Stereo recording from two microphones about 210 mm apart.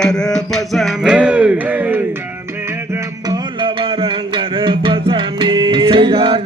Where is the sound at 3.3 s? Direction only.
20° right (ahead or behind).